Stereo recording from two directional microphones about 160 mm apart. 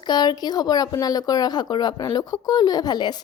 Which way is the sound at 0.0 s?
25° left (ahead or behind).